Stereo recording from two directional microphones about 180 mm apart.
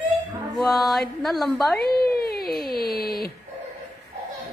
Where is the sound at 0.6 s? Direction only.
Centre (ahead or behind).